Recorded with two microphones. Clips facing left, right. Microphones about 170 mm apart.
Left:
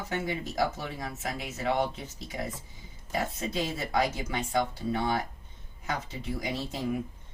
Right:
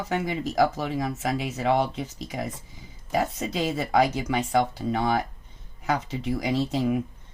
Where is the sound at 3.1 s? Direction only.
85° right.